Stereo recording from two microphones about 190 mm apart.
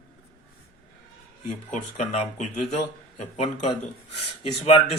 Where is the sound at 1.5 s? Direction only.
35° left (ahead or behind).